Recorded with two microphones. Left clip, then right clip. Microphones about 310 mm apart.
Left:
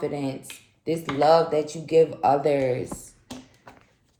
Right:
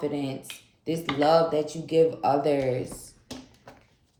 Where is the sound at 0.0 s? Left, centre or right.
Centre.